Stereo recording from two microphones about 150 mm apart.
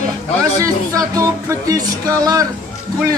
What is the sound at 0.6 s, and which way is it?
Music, 25° right (ahead or behind).